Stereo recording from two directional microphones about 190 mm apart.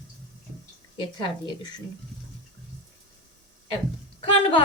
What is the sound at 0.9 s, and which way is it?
Speech, 25° left (ahead or behind).